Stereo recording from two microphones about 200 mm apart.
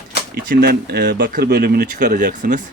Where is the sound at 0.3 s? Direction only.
50° right (ahead or behind).